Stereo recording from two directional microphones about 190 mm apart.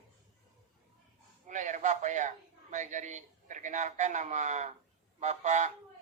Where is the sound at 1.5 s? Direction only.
40° right (ahead or behind).